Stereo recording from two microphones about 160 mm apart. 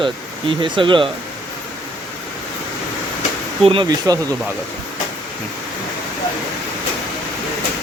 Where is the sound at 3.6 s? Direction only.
30° right (ahead or behind).